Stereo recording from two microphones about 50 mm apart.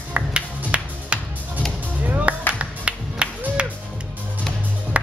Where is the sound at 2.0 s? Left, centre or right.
Right.